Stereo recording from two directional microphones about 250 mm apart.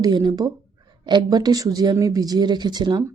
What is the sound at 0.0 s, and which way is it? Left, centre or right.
Speech, centre.